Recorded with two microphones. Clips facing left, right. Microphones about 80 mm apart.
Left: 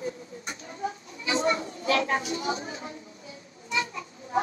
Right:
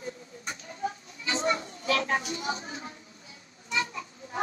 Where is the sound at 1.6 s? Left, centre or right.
Left.